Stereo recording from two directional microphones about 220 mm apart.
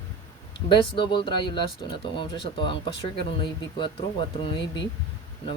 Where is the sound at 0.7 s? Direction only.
20° left (ahead or behind).